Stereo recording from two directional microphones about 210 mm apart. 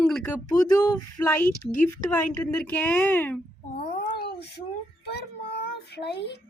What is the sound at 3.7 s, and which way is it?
Cat, 45° left (ahead or behind).